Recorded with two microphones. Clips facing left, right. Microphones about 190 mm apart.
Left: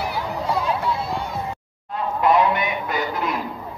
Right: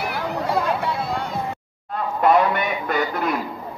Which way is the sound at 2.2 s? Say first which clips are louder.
Right 1 dB; 50° right (ahead or behind).